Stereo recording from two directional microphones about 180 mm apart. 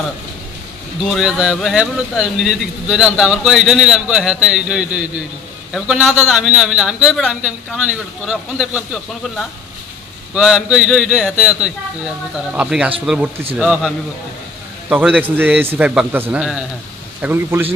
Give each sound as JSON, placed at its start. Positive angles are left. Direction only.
{"t": 1.0, "sound": "a man's voice", "side_deg": 0}